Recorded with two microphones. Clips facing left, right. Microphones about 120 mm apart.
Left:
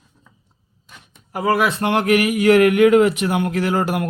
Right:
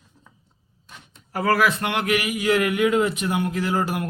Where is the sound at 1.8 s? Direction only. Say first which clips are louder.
Left 7 dB; 40° left (ahead or behind).